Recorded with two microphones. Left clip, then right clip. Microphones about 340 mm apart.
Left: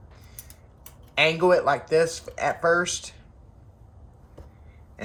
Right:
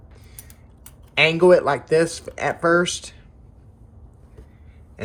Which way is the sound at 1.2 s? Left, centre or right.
Right.